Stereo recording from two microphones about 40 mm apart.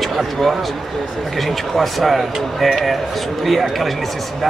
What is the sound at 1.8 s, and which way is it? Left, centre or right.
Speech, centre.